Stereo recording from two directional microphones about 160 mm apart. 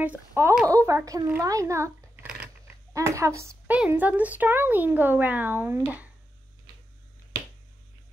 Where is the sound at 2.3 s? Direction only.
5° right (ahead or behind).